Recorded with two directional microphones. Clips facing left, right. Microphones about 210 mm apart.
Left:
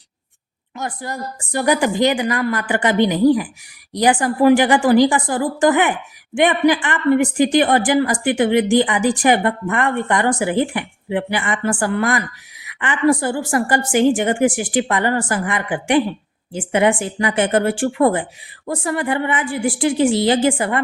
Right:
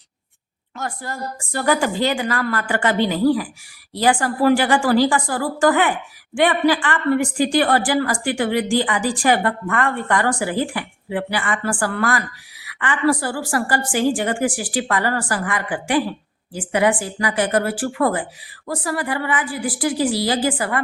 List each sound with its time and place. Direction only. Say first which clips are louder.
0.8 s a woman's voice: left 2 dB; 20° left (ahead or behind)